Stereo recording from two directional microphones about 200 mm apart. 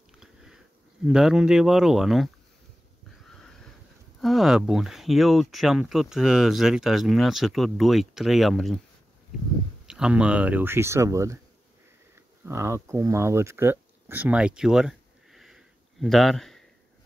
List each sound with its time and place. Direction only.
0.2 s sniff: centre (ahead or behind)
1.0 s speech: centre (ahead or behind)
3.3 s a sound: centre (ahead or behind)
4.2 s speech: centre (ahead or behind)
9.8 s speech: 5° right (ahead or behind)